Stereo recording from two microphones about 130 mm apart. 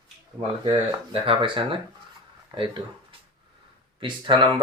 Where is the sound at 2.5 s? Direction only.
30° right (ahead or behind).